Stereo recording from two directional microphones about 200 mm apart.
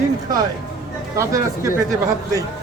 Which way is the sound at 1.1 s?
15° right (ahead or behind).